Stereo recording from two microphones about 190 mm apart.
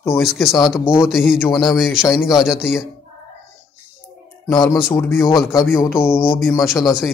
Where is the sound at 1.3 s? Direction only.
10° left (ahead or behind).